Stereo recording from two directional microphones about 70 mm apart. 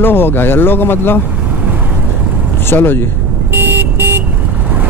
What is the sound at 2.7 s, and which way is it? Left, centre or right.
Speech, left.